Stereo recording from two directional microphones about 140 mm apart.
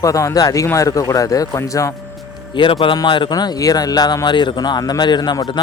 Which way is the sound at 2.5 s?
35° left (ahead or behind).